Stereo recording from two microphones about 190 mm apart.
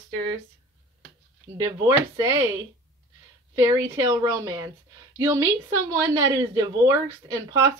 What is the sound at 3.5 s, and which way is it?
Speech, 15° right (ahead or behind).